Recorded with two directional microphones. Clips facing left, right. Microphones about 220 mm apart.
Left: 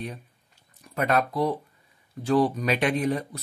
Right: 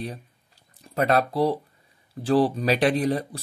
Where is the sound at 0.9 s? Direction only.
35° right (ahead or behind).